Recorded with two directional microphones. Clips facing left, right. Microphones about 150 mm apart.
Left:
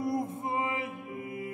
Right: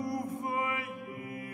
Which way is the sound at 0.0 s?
25° left (ahead or behind).